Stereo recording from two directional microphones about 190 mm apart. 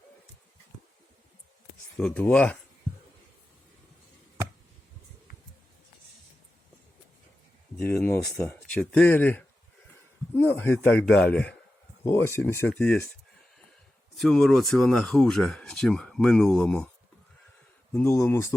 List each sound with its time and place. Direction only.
2.0 s speech: 10° left (ahead or behind)
7.8 s speech: 10° left (ahead or behind)
14.2 s speech: centre (ahead or behind)
17.9 s speech: 10° left (ahead or behind)